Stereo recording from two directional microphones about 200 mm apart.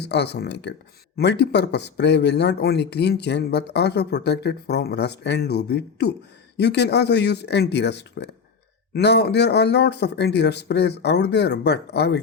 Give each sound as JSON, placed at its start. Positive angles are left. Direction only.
{"t": 0.0, "sound": "speech", "side_deg": 55}